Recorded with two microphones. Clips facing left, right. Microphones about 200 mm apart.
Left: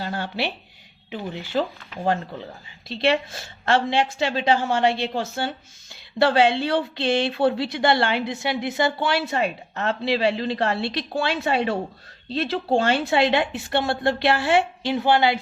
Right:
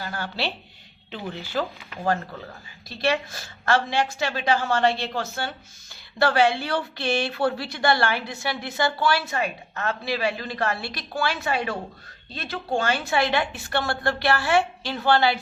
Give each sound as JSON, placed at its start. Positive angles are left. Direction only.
{"t": 0.0, "sound": "speech", "side_deg": 25}
{"t": 2.9, "sound": "speech", "side_deg": 25}